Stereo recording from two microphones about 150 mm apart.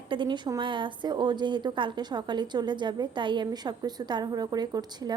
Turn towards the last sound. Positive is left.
turn(degrees=-25)  # may be behind; listen again after turning